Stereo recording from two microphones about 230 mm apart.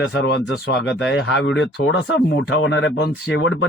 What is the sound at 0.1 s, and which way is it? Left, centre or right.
A man's voice, left.